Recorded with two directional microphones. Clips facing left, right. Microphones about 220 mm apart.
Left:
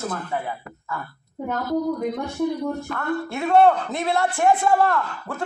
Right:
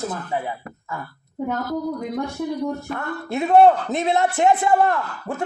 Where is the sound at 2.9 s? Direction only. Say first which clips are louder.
Left 1 dB; 20° right (ahead or behind).